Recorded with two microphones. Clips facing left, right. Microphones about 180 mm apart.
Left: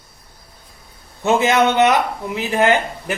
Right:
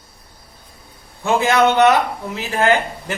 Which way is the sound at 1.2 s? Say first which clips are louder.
Even; 20° left (ahead or behind).